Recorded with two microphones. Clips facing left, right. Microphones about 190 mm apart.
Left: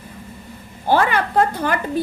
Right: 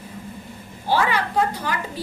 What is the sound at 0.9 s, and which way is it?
A woman's voice, 55° left (ahead or behind).